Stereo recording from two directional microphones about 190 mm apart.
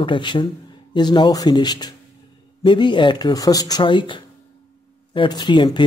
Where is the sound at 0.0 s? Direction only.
25° left (ahead or behind).